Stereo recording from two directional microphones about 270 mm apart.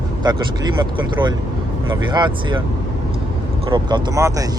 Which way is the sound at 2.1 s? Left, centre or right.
Centre.